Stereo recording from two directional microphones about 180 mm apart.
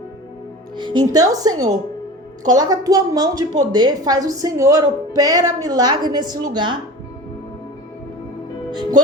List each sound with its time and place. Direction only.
0.8 s a woman's voice: 25° right (ahead or behind)